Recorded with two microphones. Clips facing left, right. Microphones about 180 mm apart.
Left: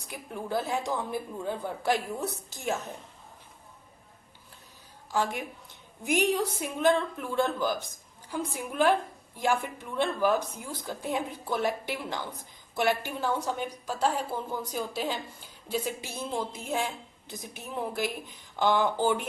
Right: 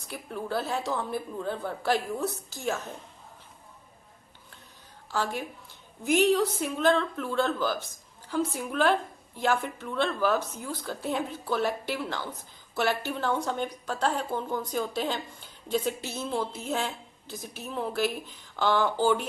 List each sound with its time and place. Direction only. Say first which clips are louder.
0.1 s a woman's voice: even; 15° left (ahead or behind)
5.1 s a woman's voice: left 1 dB; 15° left (ahead or behind)